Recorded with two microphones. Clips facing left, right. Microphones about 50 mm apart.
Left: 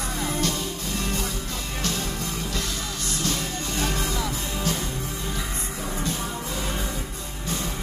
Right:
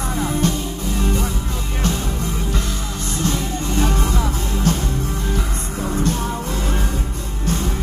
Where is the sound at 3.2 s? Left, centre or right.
Right.